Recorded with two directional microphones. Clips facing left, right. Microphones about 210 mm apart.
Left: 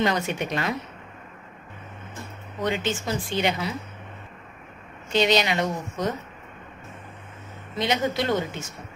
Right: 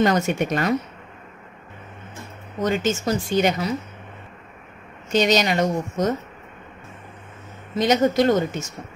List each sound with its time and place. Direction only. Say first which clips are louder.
0.0 s speech: right 5 dB; 45° right (ahead or behind)
2.6 s speech: right 5 dB; 45° right (ahead or behind)
5.1 s speech: right 3 dB; 45° right (ahead or behind)
7.7 s speech: right 7 dB; 45° right (ahead or behind)